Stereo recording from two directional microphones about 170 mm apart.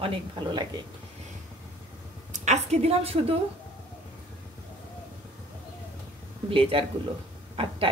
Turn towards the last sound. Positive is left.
turn(degrees=-35)  # may be behind; listen again after turning